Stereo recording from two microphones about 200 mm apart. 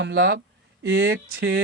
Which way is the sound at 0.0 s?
65° right (ahead or behind).